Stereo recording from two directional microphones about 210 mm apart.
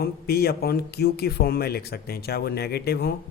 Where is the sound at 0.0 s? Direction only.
50° left (ahead or behind).